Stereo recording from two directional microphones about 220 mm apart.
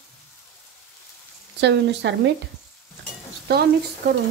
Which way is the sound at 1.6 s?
50° right (ahead or behind).